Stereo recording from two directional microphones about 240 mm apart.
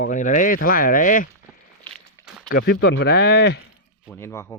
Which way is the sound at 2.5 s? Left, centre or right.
Left.